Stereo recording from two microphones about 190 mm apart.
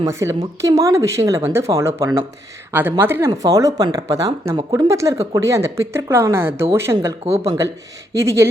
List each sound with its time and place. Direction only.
0.0 s speech: 15° right (ahead or behind)
5.1 s speech: 30° right (ahead or behind)
5.4 s speech: 15° right (ahead or behind)